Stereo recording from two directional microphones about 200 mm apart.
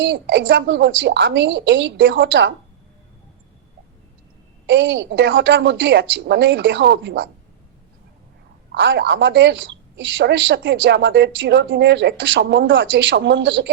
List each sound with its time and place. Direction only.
0.0 s a woman's voice: 65° right (ahead or behind)
4.6 s a woman's voice: 65° right (ahead or behind)
8.7 s a woman's voice: 65° right (ahead or behind)